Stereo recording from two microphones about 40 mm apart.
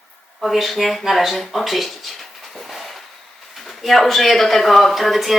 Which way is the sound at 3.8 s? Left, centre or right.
Centre.